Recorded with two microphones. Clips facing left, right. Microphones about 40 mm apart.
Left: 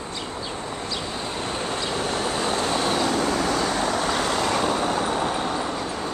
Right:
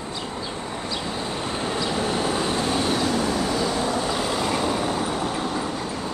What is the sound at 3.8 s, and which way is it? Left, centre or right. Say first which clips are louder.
Vehicle: left 1 dB; left.